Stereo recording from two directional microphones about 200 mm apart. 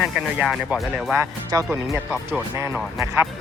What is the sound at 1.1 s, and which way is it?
Speech, 15° right (ahead or behind).